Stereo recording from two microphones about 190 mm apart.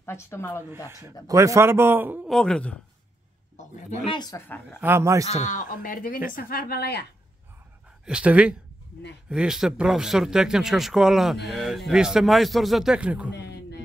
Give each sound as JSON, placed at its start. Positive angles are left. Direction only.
{"t": 0.0, "sound": "speech", "side_deg": 15}
{"t": 0.8, "sound": "a man's voice", "side_deg": -15}
{"t": 2.3, "sound": "speech", "side_deg": 5}
{"t": 3.5, "sound": "a man's voice", "side_deg": 35}
{"t": 4.1, "sound": "speech", "side_deg": 20}
{"t": 4.8, "sound": "a man's voice", "side_deg": -15}
{"t": 5.4, "sound": "speech", "side_deg": 40}
{"t": 8.0, "sound": "a man's voice", "side_deg": -5}
{"t": 13.3, "sound": "a sound", "side_deg": 60}